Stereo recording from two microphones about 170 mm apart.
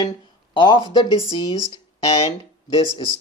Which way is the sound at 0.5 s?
30° left (ahead or behind).